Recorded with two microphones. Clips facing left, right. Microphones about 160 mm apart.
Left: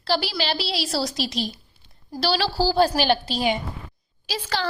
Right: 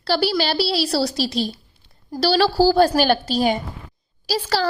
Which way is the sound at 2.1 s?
45° right (ahead or behind).